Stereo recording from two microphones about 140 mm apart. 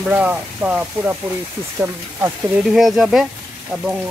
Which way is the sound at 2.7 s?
Centre (ahead or behind).